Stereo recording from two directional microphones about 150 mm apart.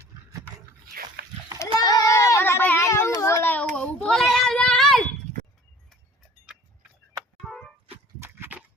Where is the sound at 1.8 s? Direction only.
25° left (ahead or behind); by 5.0 s centre (ahead or behind).